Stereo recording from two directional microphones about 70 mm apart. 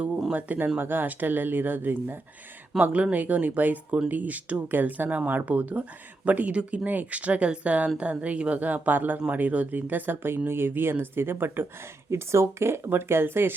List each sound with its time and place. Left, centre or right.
0.3 s speech: right
12.1 s speech: right